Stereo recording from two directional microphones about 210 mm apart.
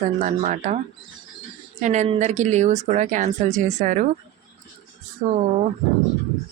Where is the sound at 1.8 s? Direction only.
35° right (ahead or behind).